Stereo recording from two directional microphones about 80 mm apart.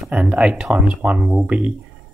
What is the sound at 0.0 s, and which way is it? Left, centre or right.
Speech, centre.